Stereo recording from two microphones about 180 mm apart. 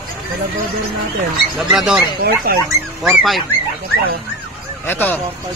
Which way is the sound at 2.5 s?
55° right (ahead or behind).